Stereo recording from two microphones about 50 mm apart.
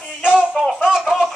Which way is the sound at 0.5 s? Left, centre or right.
Centre.